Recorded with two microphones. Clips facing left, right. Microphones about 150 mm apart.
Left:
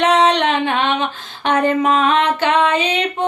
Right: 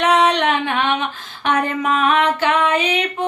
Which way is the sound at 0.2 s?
25° left (ahead or behind).